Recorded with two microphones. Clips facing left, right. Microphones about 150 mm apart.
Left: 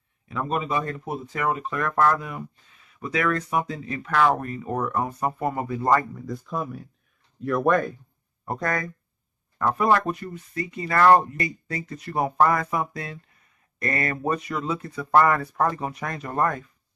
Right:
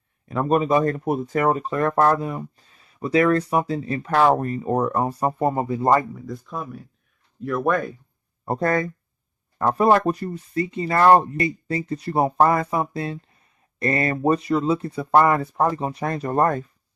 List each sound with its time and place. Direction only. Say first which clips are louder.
0.3 s speech: right 7 dB; 45° right (ahead or behind); by 6.1 s 25° right (ahead or behind)
6.1 s speech: left 1 dB; centre (ahead or behind)
8.4 s speech: right 6 dB; 30° right (ahead or behind)